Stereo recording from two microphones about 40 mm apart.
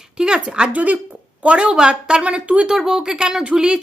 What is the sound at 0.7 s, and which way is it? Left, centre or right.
A woman's voice, right.